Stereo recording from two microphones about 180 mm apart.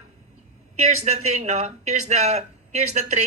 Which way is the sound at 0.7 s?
40° right (ahead or behind).